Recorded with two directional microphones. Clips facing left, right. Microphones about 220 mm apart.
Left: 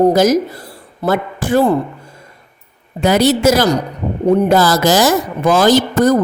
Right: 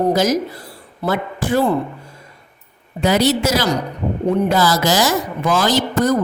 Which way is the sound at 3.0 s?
50° left (ahead or behind).